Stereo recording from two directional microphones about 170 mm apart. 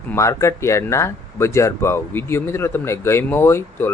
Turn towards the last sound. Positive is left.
turn(degrees=15)  # may be behind; listen again after turning